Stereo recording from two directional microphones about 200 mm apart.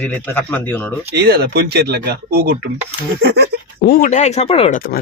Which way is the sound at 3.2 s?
55° right (ahead or behind).